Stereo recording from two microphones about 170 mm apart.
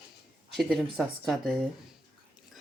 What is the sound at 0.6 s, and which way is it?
Speech, centre (ahead or behind).